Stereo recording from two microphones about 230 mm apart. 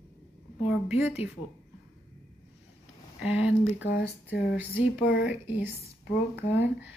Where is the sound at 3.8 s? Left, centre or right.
Left.